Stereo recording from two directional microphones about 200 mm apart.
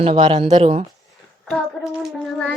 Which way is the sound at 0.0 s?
30° right (ahead or behind).